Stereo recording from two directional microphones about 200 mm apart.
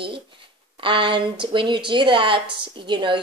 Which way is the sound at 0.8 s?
25° right (ahead or behind).